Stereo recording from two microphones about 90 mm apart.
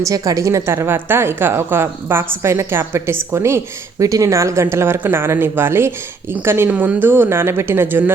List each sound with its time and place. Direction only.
0.0 s a woman's voice: 40° right (ahead or behind); by 8.1 s 25° right (ahead or behind)